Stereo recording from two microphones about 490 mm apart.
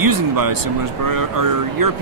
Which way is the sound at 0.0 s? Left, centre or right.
Right.